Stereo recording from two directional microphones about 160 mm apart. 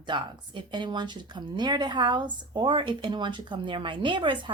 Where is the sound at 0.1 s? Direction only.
30° right (ahead or behind).